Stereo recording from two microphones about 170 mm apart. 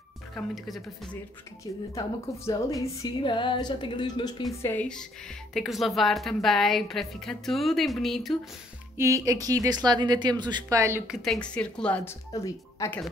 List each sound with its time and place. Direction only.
0.3 s a woman's voice: centre (ahead or behind)
2.0 s speech: 20° left (ahead or behind)
4.6 s a woman's voice: 10° left (ahead or behind)
8.9 s speech: 15° right (ahead or behind)
11.1 s a woman's voice: 5° left (ahead or behind)
12.3 s speech: 20° left (ahead or behind)